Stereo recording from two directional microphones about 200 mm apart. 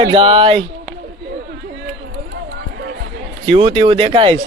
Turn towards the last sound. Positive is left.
turn(degrees=-25)  # may be behind; listen again after turning